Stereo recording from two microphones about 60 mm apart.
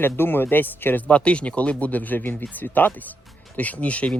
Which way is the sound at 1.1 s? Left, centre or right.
Centre.